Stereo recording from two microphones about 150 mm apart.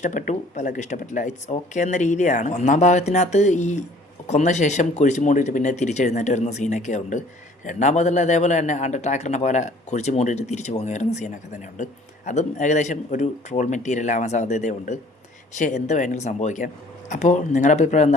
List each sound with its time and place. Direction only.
0.0 s speech: 55° left (ahead or behind)